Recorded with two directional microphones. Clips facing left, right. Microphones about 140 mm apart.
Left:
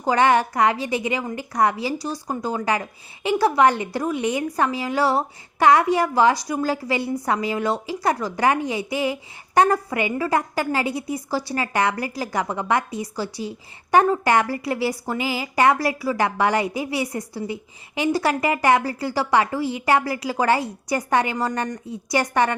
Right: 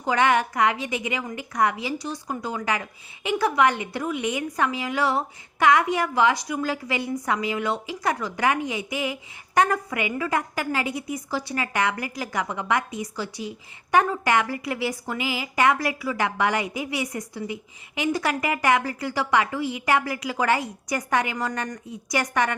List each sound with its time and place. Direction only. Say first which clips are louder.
0.0 s a woman's voice: left 3 dB; 35° left (ahead or behind)